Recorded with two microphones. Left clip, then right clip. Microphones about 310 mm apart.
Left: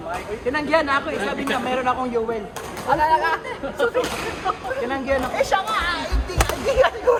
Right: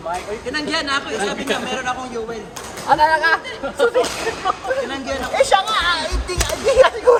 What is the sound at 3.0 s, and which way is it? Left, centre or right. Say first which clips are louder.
Speech: right 3 dB; right.